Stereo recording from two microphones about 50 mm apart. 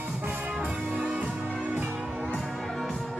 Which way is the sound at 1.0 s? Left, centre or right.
Right.